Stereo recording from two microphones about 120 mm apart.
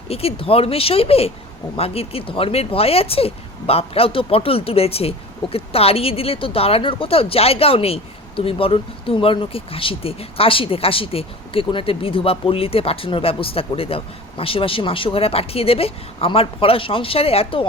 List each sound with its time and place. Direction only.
0.1 s speech: 55° left (ahead or behind)